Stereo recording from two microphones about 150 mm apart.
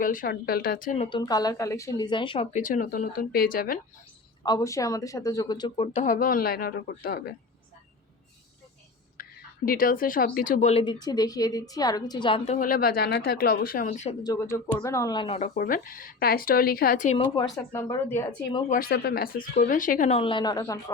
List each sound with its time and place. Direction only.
0.0 s speech: 65° left (ahead or behind)
1.2 s speech: 25° left (ahead or behind)
2.5 s speech: 55° left (ahead or behind); by 3.8 s 75° left (ahead or behind)
4.4 s speech: 25° left (ahead or behind); by 6.1 s 45° left (ahead or behind)
6.1 s speech: 70° left (ahead or behind); by 7.3 s 90° left
9.6 s speech: 75° left (ahead or behind); by 10.9 s 45° left (ahead or behind)
10.9 s speech: 25° left (ahead or behind)
12.5 s speech: 65° left (ahead or behind)
14.3 s speech: 20° left (ahead or behind)
15.4 s speech: 55° left (ahead or behind)
15.6 s speech: 70° left (ahead or behind)
17.2 s speech: 30° left (ahead or behind); by 18.3 s 15° left (ahead or behind)
18.7 s speech: 85° left; by 20.1 s 60° left (ahead or behind)
20.1 s speech: 35° left (ahead or behind)